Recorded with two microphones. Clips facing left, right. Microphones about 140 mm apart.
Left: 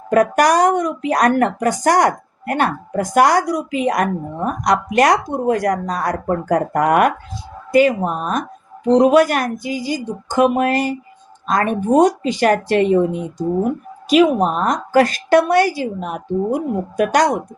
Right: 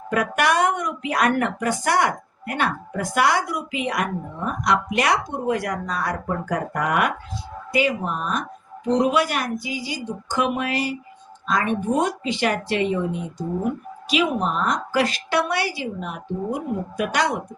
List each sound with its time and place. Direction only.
0.1 s speech: 40° left (ahead or behind)
14.1 s speech: 45° left (ahead or behind)